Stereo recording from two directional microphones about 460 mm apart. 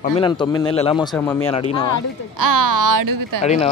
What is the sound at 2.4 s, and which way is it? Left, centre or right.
Speech, right.